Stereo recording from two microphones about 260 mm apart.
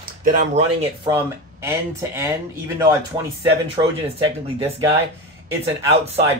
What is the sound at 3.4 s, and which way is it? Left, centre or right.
Speech, centre.